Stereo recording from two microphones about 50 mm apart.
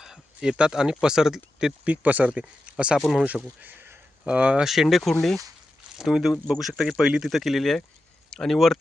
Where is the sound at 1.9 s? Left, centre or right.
Right.